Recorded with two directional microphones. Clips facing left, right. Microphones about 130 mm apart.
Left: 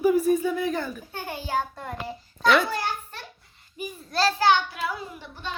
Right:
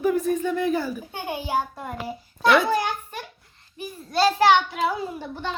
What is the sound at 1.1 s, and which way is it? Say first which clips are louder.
Speech: right 2 dB; 15° right (ahead or behind).